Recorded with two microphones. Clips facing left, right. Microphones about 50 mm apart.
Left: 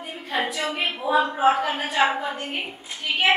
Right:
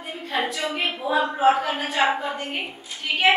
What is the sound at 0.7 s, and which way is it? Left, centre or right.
A woman's voice, centre.